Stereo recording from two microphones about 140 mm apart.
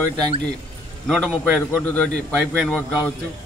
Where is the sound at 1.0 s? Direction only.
5° left (ahead or behind).